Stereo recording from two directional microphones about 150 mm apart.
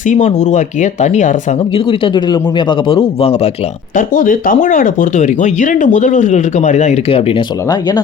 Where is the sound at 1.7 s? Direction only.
35° left (ahead or behind).